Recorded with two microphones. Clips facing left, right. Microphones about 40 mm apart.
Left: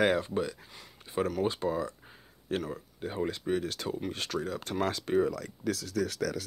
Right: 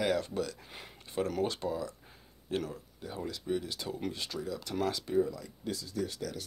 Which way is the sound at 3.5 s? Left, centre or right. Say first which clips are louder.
Left 3 dB; left.